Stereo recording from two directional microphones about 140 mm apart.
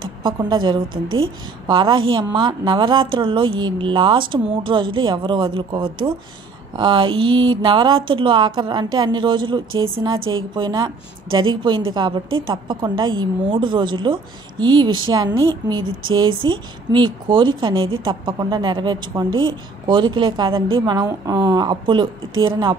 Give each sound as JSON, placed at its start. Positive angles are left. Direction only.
{"t": 0.2, "sound": "a woman's voice", "side_deg": -35}